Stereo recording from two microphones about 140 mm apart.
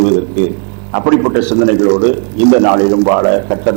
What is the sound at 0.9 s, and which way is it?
A man's voice, 15° right (ahead or behind).